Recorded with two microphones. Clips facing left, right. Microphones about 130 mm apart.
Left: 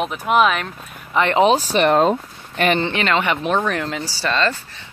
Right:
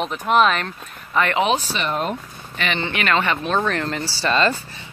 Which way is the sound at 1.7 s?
65° left (ahead or behind).